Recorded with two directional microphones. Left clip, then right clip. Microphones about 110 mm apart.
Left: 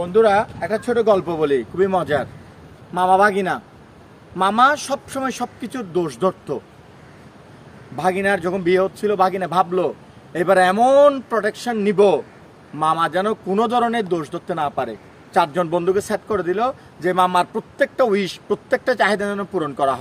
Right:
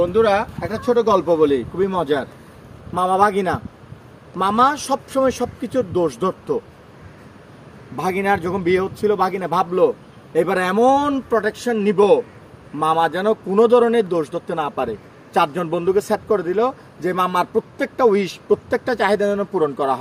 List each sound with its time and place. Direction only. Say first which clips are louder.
0.0 s speech: left 1 dB; 35° left (ahead or behind)
7.9 s a man's voice: left 1 dB; 30° left (ahead or behind)